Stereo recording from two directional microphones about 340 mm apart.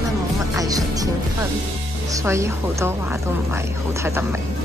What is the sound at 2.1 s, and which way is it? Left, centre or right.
A woman's voice, centre.